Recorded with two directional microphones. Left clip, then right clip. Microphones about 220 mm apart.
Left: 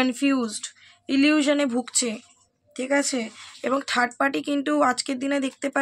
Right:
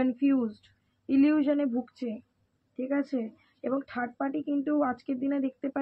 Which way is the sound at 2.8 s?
5° left (ahead or behind).